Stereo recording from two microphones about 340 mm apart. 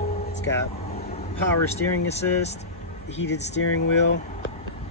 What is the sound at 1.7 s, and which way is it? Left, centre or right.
Speech, centre.